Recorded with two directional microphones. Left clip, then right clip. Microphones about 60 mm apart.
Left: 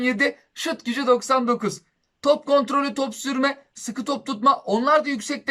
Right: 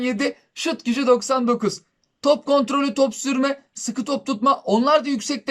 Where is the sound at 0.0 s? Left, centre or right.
Right.